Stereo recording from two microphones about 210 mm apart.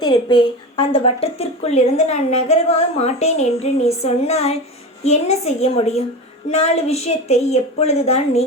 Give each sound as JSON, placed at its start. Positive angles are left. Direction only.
{"t": 0.0, "sound": "a woman's voice", "side_deg": 20}